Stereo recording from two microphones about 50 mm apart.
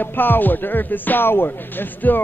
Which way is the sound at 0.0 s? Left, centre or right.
Left.